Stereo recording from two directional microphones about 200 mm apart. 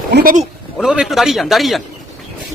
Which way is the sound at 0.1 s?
45° right (ahead or behind).